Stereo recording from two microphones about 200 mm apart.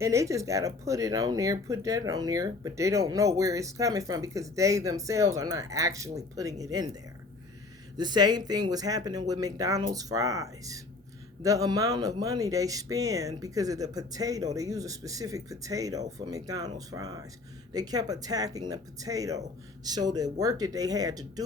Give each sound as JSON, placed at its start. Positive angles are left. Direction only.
{"t": 0.0, "sound": "speech", "side_deg": -15}
{"t": 7.9, "sound": "speech", "side_deg": -20}